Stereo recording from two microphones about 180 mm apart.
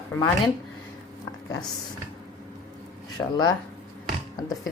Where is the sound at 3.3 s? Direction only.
20° left (ahead or behind).